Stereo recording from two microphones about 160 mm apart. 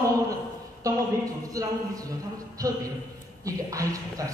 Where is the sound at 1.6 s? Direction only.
20° right (ahead or behind).